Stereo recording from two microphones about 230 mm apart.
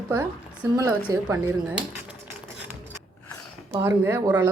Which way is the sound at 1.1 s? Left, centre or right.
Centre.